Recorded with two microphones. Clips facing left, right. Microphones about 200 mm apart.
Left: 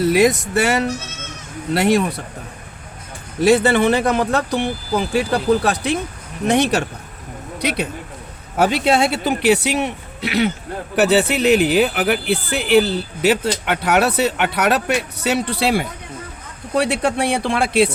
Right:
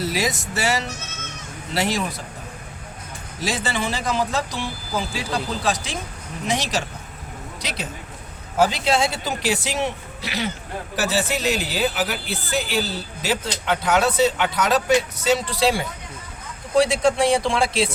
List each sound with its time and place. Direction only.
0.0 s speech: 55° left (ahead or behind)
3.4 s speech: 60° left (ahead or behind)